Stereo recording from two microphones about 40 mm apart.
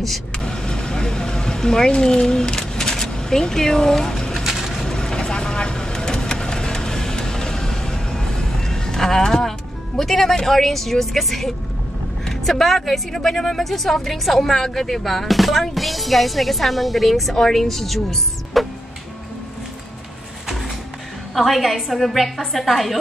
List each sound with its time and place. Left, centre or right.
0.0 s speech: centre
0.5 s vehicle: centre
4.4 s pigeon: centre
4.8 s vehicle: centre
9.9 s a woman's voice: centre
18.6 s music: centre
21.4 s a woman's voice: centre